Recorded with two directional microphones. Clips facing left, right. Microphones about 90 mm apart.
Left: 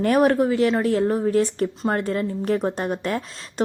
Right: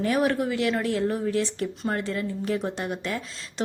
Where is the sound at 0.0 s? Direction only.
50° left (ahead or behind).